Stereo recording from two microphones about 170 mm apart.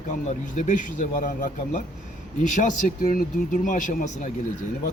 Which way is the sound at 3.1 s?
55° left (ahead or behind).